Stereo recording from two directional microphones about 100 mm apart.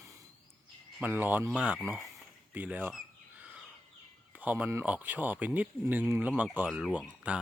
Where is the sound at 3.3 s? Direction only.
15° right (ahead or behind).